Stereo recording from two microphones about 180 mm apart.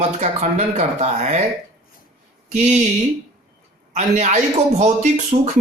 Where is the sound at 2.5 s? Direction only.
40° right (ahead or behind).